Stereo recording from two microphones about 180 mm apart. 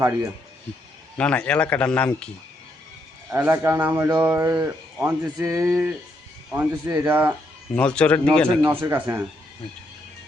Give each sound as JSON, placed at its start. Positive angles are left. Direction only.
{"t": 1.2, "sound": "speech", "side_deg": 5}
{"t": 3.2, "sound": "speech", "side_deg": -10}
{"t": 7.8, "sound": "speech", "side_deg": 5}
{"t": 8.7, "sound": "speech", "side_deg": -10}